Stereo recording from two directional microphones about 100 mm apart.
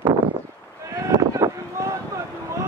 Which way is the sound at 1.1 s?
35° right (ahead or behind).